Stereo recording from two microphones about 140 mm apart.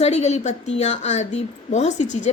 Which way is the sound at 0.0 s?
50° left (ahead or behind).